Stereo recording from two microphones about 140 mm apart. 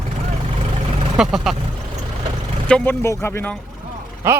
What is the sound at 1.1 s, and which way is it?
Speech, 5° right (ahead or behind).